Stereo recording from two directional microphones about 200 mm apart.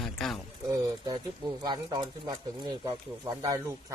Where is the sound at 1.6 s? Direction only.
20° right (ahead or behind).